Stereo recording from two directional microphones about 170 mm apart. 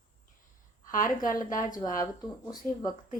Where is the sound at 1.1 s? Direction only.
50° left (ahead or behind).